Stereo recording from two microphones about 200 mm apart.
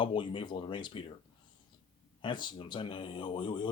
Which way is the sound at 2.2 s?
25° left (ahead or behind).